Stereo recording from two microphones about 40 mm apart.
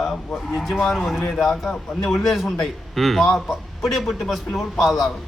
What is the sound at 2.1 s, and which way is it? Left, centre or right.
A man's voice, centre.